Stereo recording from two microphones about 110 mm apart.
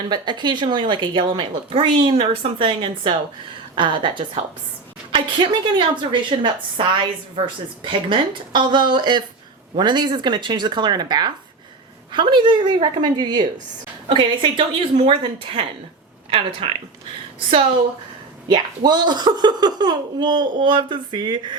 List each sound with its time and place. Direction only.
0.1 s a woman's voice: 45° right (ahead or behind)
16.6 s a woman's voice: 55° right (ahead or behind)